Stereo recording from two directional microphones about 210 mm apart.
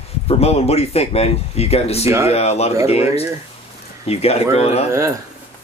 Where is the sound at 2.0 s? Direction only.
15° right (ahead or behind).